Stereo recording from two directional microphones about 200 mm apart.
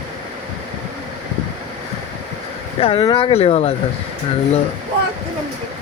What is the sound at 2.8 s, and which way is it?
Speech, 30° left (ahead or behind).